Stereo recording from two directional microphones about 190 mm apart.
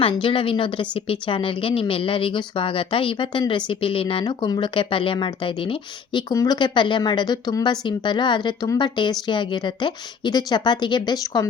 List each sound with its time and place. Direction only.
0.0 s a woman's voice: 25° left (ahead or behind)